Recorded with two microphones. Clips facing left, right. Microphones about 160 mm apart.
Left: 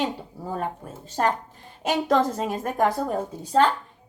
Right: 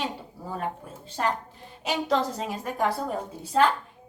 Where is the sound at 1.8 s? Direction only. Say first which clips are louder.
Left 4 dB; 50° left (ahead or behind).